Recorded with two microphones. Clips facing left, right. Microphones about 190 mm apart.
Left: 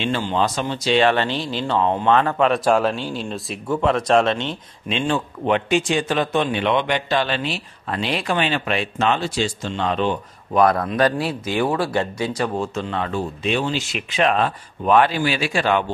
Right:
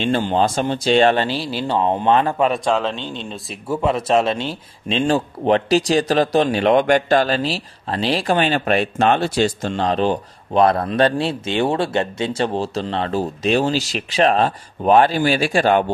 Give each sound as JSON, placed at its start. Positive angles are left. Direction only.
{"t": 0.1, "sound": "speech", "side_deg": -50}
{"t": 1.3, "sound": "speech", "side_deg": -10}
{"t": 1.8, "sound": "a man's voice", "side_deg": -20}
{"t": 2.5, "sound": "speech", "side_deg": 5}
{"t": 4.8, "sound": "speech", "side_deg": -35}
{"t": 9.2, "sound": "speech", "side_deg": -60}
{"t": 9.8, "sound": "speech", "side_deg": -35}